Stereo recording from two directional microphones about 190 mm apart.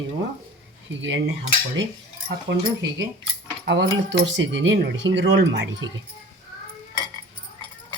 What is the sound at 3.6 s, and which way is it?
Speech, 65° right (ahead or behind).